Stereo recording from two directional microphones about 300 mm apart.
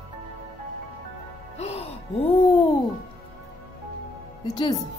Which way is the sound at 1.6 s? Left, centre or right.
Centre.